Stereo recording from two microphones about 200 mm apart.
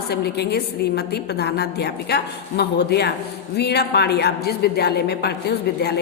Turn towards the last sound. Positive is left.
turn(degrees=55)  # may be behind; listen again after turning